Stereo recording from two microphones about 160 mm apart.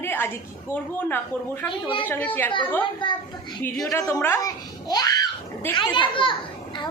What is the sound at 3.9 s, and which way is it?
A child's voice, 20° left (ahead or behind).